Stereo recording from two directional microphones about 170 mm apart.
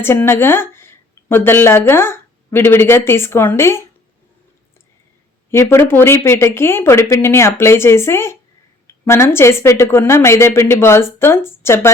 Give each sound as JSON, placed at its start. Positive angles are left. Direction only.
{"t": 0.0, "sound": "speech", "side_deg": 15}
{"t": 5.5, "sound": "a woman's voice", "side_deg": 15}